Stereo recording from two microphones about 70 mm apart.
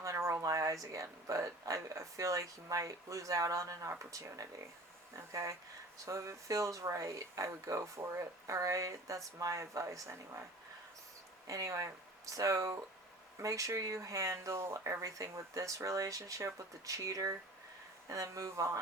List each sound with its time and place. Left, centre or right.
0.0 s speech: right
11.4 s speech: right